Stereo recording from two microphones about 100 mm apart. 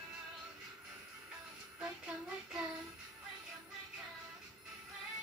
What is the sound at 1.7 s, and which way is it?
Speech, 10° right (ahead or behind).